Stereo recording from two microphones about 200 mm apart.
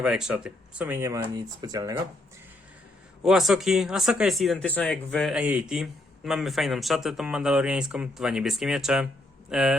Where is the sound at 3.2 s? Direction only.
Centre (ahead or behind).